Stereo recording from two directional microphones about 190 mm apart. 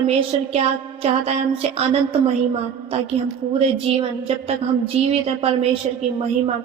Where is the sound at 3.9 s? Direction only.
30° right (ahead or behind).